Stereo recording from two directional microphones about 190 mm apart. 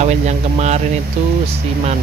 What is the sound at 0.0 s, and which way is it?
Speech, 35° right (ahead or behind).